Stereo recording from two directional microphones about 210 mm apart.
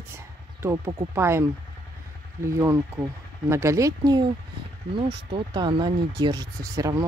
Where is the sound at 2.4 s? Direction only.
15° right (ahead or behind).